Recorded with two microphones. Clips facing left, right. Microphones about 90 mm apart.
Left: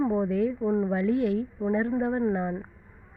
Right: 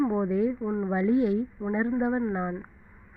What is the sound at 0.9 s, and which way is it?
A woman's voice, 20° right (ahead or behind).